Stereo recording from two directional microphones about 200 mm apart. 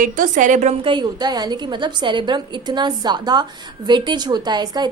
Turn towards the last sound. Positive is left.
turn(degrees=-20)  # may be behind; listen again after turning